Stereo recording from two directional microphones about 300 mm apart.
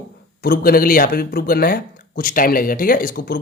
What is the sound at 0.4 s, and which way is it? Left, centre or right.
Speech, left.